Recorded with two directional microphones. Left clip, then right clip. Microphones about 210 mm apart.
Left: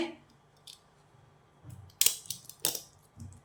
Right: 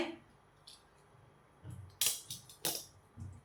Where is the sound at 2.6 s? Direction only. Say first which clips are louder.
Left 4 dB; 45° left (ahead or behind).